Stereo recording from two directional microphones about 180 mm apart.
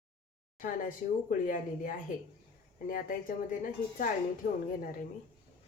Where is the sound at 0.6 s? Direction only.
50° left (ahead or behind).